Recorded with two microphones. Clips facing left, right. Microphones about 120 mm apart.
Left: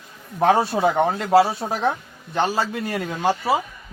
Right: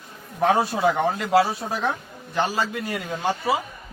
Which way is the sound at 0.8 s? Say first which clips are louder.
Left 2 dB; 35° left (ahead or behind).